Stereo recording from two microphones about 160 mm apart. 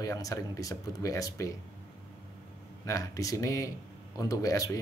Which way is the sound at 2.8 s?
20° left (ahead or behind).